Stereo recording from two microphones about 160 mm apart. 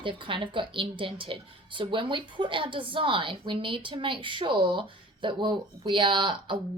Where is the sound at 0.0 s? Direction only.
30° right (ahead or behind).